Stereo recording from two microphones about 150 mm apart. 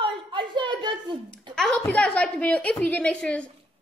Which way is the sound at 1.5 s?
5° left (ahead or behind).